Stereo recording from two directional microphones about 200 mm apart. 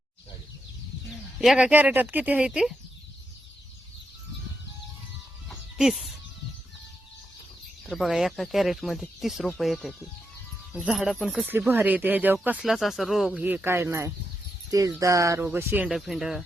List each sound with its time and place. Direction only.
1.4 s speech: 5° right (ahead or behind)
5.5 s chicken: centre (ahead or behind)
7.9 s speech: centre (ahead or behind)